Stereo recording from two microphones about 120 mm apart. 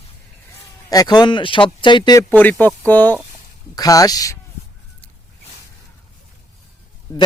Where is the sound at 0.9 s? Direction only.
35° left (ahead or behind).